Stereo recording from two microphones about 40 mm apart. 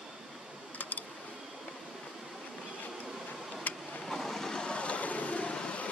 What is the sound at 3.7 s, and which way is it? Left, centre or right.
Vehicle, left.